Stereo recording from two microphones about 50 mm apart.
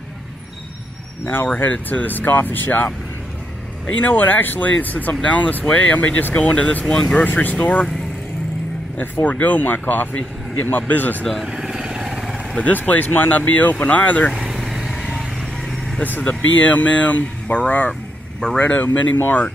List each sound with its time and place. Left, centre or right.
1.2 s speech: left
4.0 s speech: left
6.9 s speech: centre
7.2 s speech: left
8.9 s speech: left
11.4 s vehicle: centre
12.5 s speech: left
14.5 s vehicle: centre
16.0 s speech: left
16.3 s speech: left
19.1 s speech: left